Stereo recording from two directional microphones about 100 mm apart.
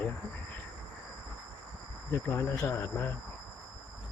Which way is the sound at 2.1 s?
25° left (ahead or behind).